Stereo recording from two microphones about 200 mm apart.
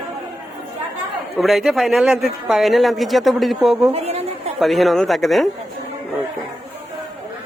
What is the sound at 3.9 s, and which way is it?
Speech, 30° right (ahead or behind).